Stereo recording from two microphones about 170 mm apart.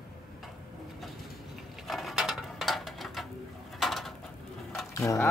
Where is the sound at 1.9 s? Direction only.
Centre (ahead or behind).